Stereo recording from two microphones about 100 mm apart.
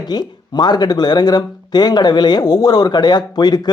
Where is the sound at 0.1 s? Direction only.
45° left (ahead or behind).